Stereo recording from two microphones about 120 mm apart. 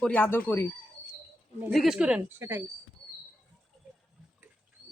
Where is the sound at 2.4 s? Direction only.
20° right (ahead or behind).